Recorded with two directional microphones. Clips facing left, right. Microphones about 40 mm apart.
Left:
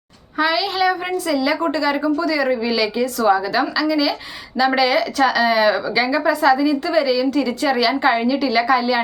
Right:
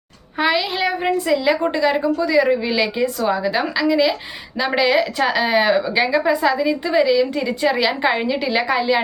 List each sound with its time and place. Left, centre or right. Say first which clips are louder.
0.3 s a woman's voice: even; right